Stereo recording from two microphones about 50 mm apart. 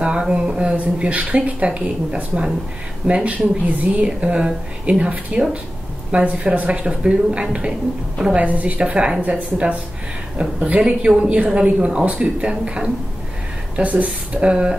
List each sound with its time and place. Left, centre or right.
0.0 s speech: right